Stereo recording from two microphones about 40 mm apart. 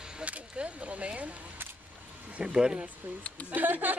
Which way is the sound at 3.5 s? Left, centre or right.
Right.